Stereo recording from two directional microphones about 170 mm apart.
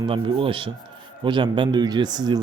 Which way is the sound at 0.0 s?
30° right (ahead or behind).